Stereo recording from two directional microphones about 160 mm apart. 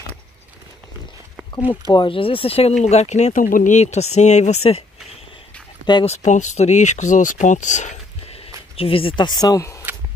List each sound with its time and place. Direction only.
1.7 s speech: 30° left (ahead or behind)
6.0 s speech: 45° left (ahead or behind)
8.7 s speech: 35° left (ahead or behind)